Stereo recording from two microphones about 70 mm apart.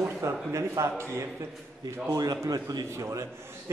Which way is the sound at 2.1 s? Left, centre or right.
Right.